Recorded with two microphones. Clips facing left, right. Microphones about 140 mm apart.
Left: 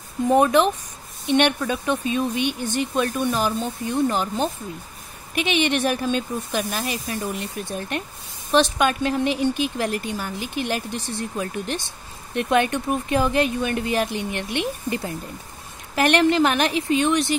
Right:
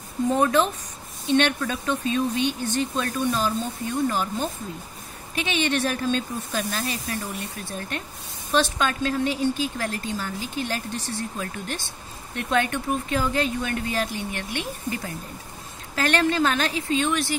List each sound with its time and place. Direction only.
0.3 s a woman's voice: 15° left (ahead or behind)
8.5 s a woman's voice: 15° left (ahead or behind)